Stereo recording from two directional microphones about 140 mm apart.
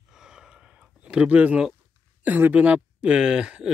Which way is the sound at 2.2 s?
10° right (ahead or behind).